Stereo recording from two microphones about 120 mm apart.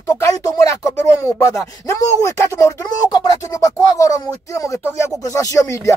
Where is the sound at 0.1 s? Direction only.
30° left (ahead or behind).